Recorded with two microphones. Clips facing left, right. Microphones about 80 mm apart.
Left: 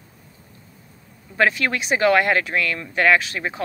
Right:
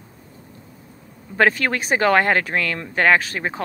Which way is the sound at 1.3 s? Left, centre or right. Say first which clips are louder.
Right 2 dB; right.